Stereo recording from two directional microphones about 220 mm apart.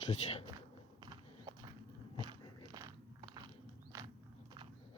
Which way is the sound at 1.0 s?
20° right (ahead or behind).